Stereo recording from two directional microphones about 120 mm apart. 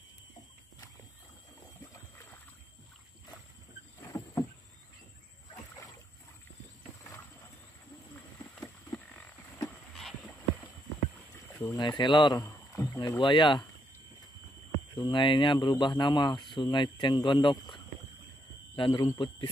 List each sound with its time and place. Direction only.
4.1 s vehicle: 30° left (ahead or behind)
8.5 s a sound: 10° left (ahead or behind)
11.6 s speech: 35° left (ahead or behind)
13.2 s speech: 40° left (ahead or behind)
15.0 s a man's voice: 40° left (ahead or behind)